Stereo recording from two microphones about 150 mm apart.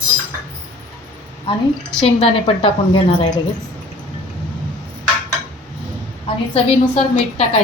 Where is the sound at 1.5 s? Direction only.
35° left (ahead or behind).